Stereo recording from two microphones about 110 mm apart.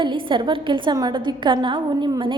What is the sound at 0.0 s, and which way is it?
A woman's voice, 45° right (ahead or behind).